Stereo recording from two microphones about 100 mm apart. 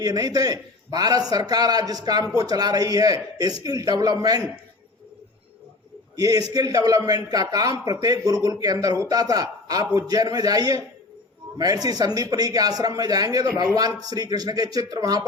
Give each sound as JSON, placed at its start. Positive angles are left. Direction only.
{"t": 0.0, "sound": "a man's voice", "side_deg": -40}
{"t": 6.1, "sound": "a man's voice", "side_deg": -40}